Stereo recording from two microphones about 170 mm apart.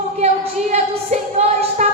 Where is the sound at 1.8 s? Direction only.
40° right (ahead or behind).